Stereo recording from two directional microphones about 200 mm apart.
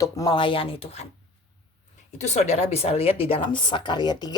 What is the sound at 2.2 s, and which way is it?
Speech, 35° left (ahead or behind).